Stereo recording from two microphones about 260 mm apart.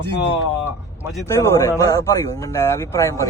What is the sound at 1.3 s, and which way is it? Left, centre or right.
Speech, centre.